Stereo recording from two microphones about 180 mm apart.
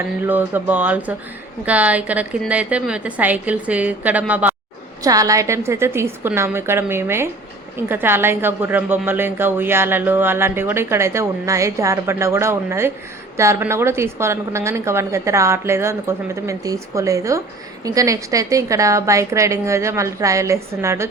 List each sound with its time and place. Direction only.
0.2 s a woman's voice: 10° right (ahead or behind)
5.0 s a woman's voice: 20° right (ahead or behind)